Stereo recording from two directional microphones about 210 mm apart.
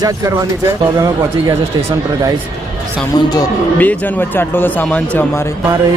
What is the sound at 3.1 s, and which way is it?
Speech, 20° left (ahead or behind).